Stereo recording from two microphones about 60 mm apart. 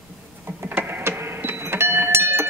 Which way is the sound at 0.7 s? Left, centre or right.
Right.